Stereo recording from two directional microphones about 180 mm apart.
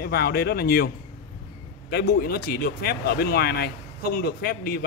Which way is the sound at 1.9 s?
60° left (ahead or behind).